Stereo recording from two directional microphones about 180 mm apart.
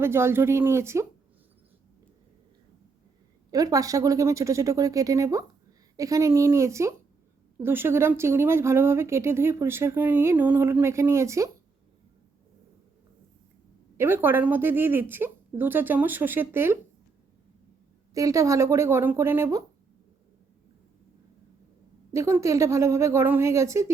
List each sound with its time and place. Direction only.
0.0 s speech: 15° right (ahead or behind)
3.5 s speech: 20° right (ahead or behind)
13.9 s speech: 15° right (ahead or behind)
18.1 s speech: 20° right (ahead or behind)
22.1 s speech: 15° right (ahead or behind)